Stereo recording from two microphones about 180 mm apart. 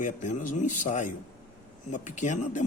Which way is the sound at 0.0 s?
45° left (ahead or behind).